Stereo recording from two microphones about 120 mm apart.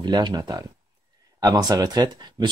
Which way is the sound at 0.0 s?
35° right (ahead or behind).